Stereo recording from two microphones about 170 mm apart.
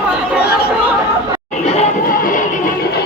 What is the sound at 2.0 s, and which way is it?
Music, 55° left (ahead or behind).